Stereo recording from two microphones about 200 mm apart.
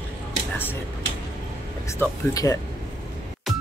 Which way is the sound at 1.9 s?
15° left (ahead or behind).